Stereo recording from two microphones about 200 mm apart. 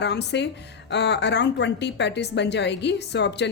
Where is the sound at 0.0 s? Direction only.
60° left (ahead or behind).